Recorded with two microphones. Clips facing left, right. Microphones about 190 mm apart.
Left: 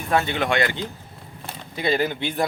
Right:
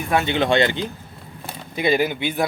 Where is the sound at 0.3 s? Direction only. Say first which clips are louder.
Right 4 dB; 25° right (ahead or behind).